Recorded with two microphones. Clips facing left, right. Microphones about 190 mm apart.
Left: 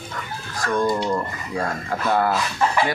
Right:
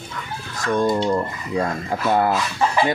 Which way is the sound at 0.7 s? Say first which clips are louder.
Right 2 dB; 25° right (ahead or behind).